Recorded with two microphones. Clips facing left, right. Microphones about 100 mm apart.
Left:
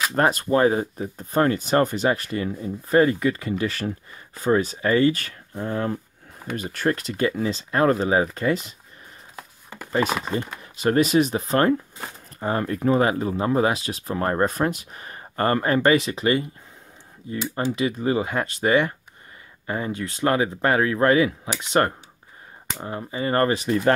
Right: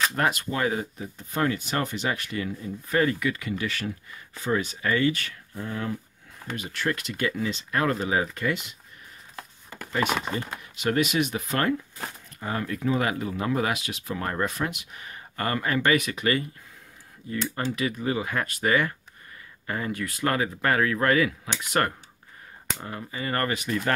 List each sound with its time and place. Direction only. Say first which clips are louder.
0.1 s speech: left 6 dB; 35° left (ahead or behind)
10.6 s speech: left 5 dB; 35° left (ahead or behind)